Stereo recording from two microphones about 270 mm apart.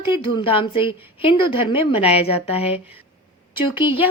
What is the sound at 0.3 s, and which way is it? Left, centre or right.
A woman's voice, centre.